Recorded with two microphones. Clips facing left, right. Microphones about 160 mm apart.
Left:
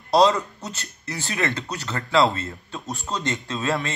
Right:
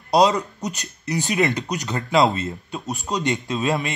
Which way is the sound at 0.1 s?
15° right (ahead or behind).